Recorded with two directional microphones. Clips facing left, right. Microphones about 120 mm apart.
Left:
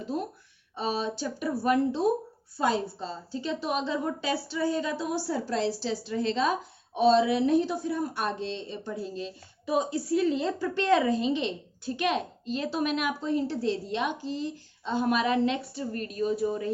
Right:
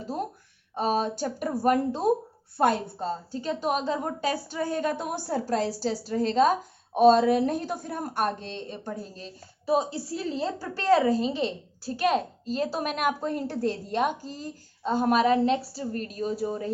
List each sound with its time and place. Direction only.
0.7 s a woman's voice: 45° right (ahead or behind)